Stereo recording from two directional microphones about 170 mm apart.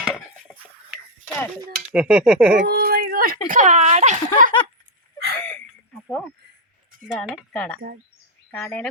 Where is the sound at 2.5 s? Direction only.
60° right (ahead or behind).